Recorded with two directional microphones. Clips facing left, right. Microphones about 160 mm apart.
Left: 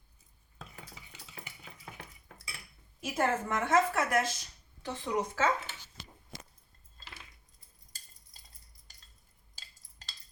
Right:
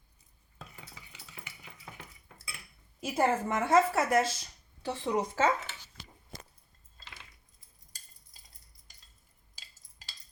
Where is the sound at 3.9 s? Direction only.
30° right (ahead or behind).